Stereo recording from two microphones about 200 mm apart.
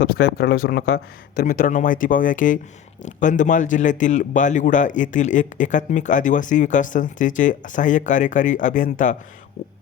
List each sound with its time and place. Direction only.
0.0 s a man's voice: 50° left (ahead or behind)